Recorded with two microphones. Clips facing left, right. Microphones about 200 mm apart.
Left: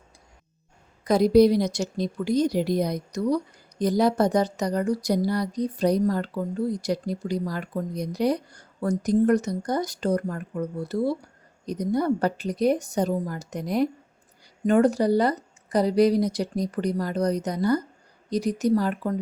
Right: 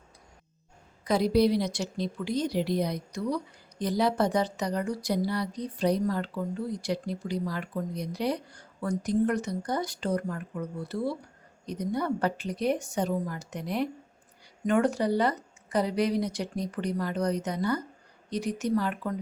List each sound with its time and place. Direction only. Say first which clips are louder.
1.0 s a woman's voice: left 6 dB; 45° left (ahead or behind)